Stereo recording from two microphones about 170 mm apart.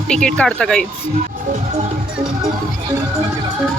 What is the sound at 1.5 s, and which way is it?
Music, 40° right (ahead or behind).